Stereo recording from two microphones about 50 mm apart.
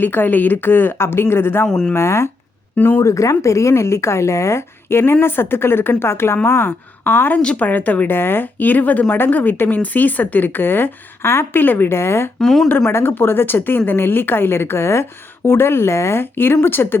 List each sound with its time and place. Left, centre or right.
0.0 s a woman's voice: left
1.0 s speech: left
1.6 s speech: centre
1.9 s speech: left
2.7 s speech: left
3.0 s a woman's voice: left
7.4 s a woman's voice: left
8.1 s a woman's voice: left
11.9 s speech: left
12.4 s speech: centre
12.9 s a woman's voice: left
16.2 s a woman's voice: left